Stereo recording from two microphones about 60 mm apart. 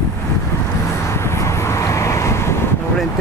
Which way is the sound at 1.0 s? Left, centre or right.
Left.